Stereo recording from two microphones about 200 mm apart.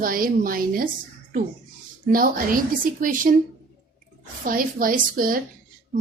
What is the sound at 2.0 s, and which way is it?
A woman's voice, 45° right (ahead or behind).